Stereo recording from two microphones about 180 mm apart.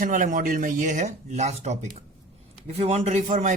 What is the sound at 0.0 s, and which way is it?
A man's voice, 45° right (ahead or behind).